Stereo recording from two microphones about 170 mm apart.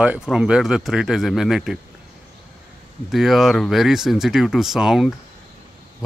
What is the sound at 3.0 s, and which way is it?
Speech, centre (ahead or behind).